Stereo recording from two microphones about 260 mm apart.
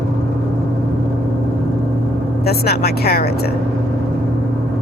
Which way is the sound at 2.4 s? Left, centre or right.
Left.